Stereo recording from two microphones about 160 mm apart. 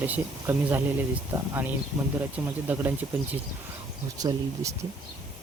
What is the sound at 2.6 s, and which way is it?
Speech, 10° right (ahead or behind).